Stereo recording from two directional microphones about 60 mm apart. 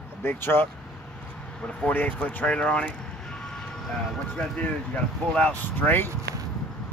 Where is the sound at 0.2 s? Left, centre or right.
Left.